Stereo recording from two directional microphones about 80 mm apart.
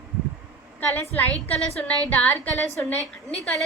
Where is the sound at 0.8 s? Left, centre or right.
Left.